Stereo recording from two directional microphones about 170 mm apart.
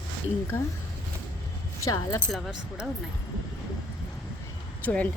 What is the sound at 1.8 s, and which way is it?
Speech, 20° left (ahead or behind).